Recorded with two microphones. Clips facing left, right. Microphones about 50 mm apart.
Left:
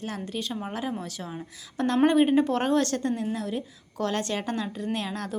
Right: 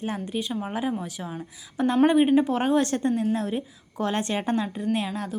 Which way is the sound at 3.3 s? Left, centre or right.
Right.